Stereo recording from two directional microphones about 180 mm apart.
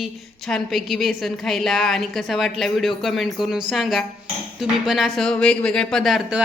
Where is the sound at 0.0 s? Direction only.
Centre (ahead or behind).